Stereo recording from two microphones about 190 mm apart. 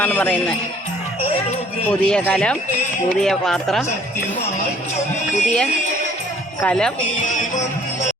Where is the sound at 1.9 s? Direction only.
5° left (ahead or behind).